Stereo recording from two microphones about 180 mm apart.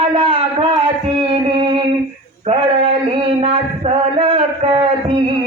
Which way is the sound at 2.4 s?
30° right (ahead or behind).